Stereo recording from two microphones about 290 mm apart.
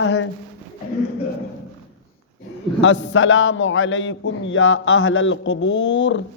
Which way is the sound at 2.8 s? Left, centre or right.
Left.